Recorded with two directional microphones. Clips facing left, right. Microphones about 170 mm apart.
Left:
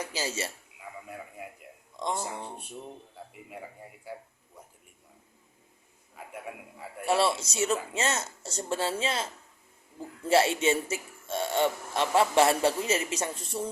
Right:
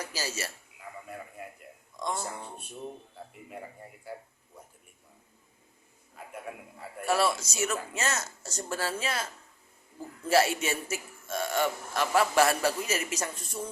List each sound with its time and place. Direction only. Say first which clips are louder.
0.0 s speech: left 3 dB; 25° left (ahead or behind)
2.0 s a man's voice: left 2 dB; 20° left (ahead or behind)
7.0 s a man's voice: left 1 dB; 25° left (ahead or behind)